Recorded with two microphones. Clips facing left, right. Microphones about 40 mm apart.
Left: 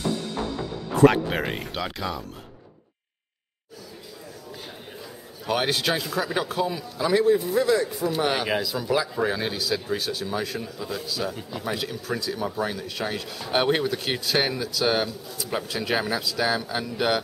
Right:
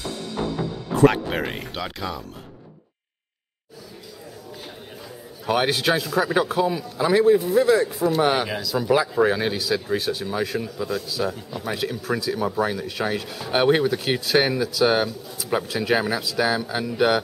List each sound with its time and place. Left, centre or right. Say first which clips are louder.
1.0 s speech: even; centre
5.5 s speech: right 3 dB; centre
8.5 s speech: left 3 dB; centre
8.7 s speech: right 5 dB; centre